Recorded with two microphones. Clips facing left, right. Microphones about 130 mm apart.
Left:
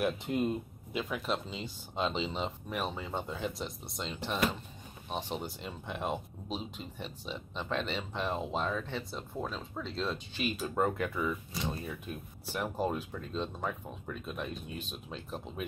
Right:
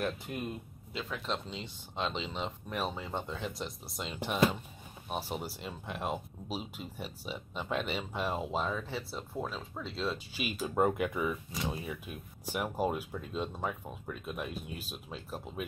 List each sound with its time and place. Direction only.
0.2 s speech: 20° left (ahead or behind); by 15.6 s 5° right (ahead or behind)